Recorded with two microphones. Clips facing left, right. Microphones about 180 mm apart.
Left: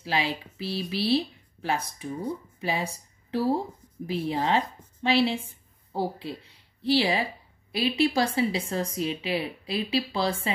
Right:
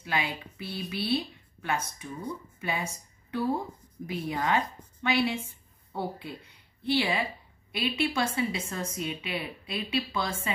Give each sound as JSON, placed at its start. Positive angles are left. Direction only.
{"t": 0.0, "sound": "a woman's voice", "side_deg": 30}